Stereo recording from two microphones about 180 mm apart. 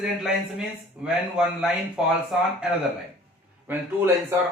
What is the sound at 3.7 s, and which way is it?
Speech, 10° right (ahead or behind).